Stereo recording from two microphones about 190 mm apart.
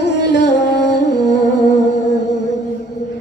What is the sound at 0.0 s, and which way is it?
Music, 65° left (ahead or behind).